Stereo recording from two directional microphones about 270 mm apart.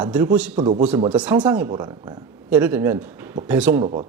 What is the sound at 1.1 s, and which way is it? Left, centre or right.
Speech, centre.